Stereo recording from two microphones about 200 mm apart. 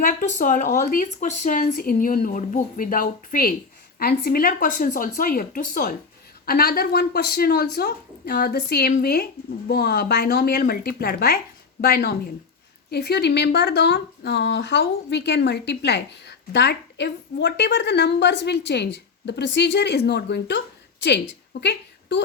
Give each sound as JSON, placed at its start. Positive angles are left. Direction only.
{"t": 0.0, "sound": "speech", "side_deg": 40}
{"t": 21.6, "sound": "a woman's voice", "side_deg": 60}